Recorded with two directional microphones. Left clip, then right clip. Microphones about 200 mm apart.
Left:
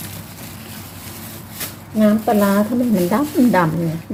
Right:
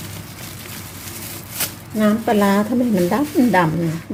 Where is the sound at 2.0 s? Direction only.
25° right (ahead or behind).